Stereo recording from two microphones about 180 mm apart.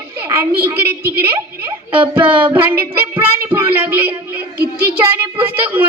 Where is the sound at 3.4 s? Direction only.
10° right (ahead or behind).